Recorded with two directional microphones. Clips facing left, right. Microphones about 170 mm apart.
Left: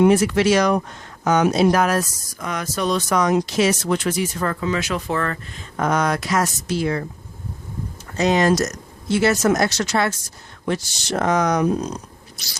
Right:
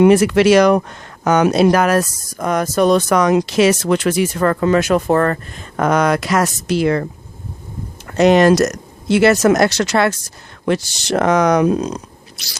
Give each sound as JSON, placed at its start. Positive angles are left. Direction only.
{"t": 0.0, "sound": "speech", "side_deg": -80}
{"t": 5.7, "sound": "speech", "side_deg": -75}
{"t": 8.0, "sound": "speech", "side_deg": -65}